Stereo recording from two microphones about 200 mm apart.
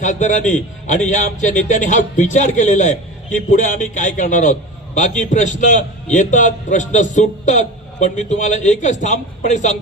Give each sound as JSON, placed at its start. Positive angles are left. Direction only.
{"t": 0.0, "sound": "a man's voice", "side_deg": 40}